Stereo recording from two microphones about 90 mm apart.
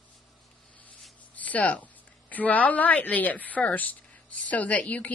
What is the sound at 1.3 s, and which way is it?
A woman's voice, 15° left (ahead or behind).